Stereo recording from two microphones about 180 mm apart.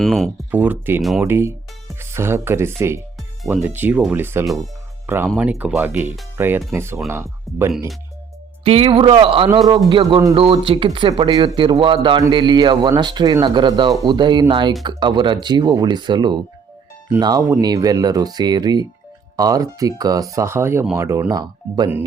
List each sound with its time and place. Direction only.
0.0 s speech: centre (ahead or behind)
0.5 s speech: 10° right (ahead or behind)
1.3 s speech: 15° right (ahead or behind)
3.2 s music: centre (ahead or behind)
3.6 s speech: 10° right (ahead or behind)
4.4 s speech: centre (ahead or behind)
5.0 s speech: 10° right (ahead or behind)
8.6 s speech: 35° right (ahead or behind)